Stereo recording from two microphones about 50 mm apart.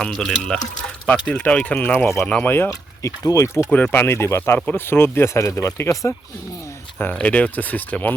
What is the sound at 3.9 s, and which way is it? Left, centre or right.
Speech, left.